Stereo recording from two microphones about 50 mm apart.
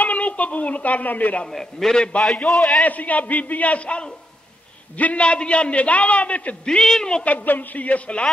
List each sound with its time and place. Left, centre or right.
0.0 s a woman's voice: left
1.5 s a man's voice: centre
2.8 s a man's voice: left
6.8 s a man's voice: centre
7.2 s a man's voice: left